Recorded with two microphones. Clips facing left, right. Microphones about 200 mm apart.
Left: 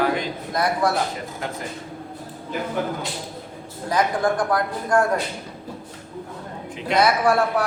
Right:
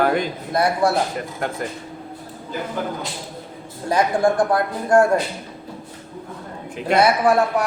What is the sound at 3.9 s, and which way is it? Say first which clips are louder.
Speech: right 3 dB; 25° right (ahead or behind).